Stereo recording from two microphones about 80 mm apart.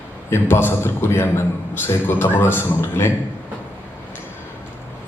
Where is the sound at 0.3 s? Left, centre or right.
Left.